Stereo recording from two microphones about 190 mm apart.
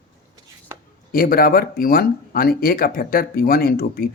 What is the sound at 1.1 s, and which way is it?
Speech, 50° left (ahead or behind).